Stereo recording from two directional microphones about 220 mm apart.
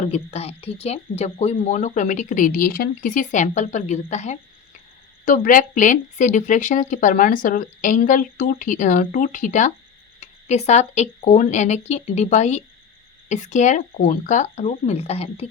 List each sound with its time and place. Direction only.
0.1 s speech: 25° left (ahead or behind)